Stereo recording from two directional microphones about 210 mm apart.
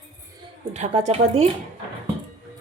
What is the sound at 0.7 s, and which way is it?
Speech, 35° right (ahead or behind).